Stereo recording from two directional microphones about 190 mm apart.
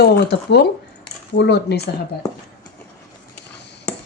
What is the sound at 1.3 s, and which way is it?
Speech, 60° left (ahead or behind).